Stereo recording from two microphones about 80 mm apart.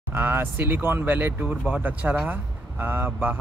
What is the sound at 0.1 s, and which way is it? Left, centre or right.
Speech, right.